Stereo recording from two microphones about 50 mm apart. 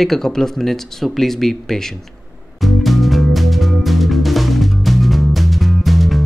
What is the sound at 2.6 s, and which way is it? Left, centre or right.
Music, centre.